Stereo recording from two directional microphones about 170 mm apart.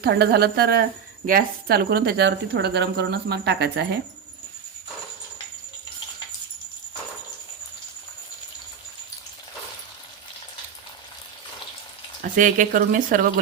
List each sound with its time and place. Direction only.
0.0 s speech: 70° right (ahead or behind)
12.2 s speech: 50° right (ahead or behind)